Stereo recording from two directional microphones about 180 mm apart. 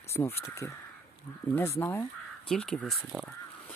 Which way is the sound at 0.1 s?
15° left (ahead or behind).